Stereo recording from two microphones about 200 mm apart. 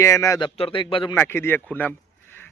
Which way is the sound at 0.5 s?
25° left (ahead or behind).